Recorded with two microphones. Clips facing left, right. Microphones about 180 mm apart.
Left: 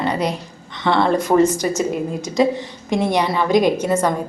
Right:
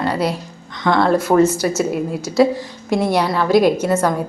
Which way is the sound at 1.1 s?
5° right (ahead or behind).